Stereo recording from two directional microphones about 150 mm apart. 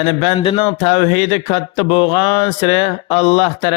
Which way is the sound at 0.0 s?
35° left (ahead or behind).